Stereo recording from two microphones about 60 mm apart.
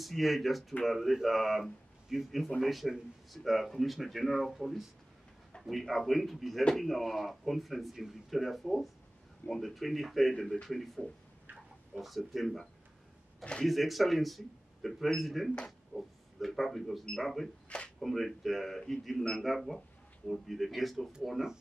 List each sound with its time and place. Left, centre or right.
0.0 s speech: centre
13.4 s speech: centre
13.7 s speech: centre
15.5 s speech: centre
16.0 s a man's voice: centre
17.7 s speech: left
18.0 s speech: centre